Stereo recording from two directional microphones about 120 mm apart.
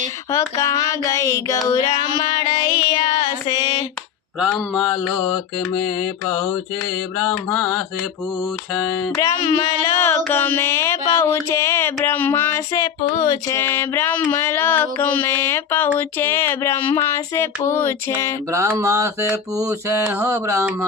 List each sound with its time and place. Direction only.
0.3 s a sound: 25° left (ahead or behind)
1.6 s child singing: 30° left (ahead or behind)
4.4 s mantra: centre (ahead or behind)
7.2 s mantra: centre (ahead or behind)
9.1 s child singing: 35° left (ahead or behind)
9.6 s a sound: 20° left (ahead or behind)
18.5 s mantra: 25° right (ahead or behind)